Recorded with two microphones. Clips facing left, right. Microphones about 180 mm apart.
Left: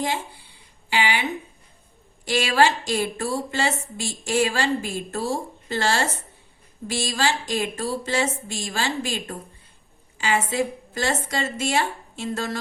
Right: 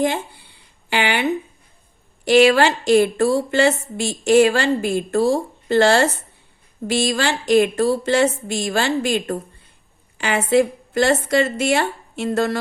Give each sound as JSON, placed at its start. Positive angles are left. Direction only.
{"t": 0.9, "sound": "speech", "side_deg": -60}